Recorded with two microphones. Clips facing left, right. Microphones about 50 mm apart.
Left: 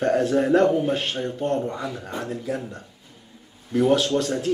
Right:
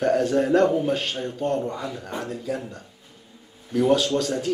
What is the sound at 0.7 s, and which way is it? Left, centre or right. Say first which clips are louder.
A man's voice: left 1 dB; left.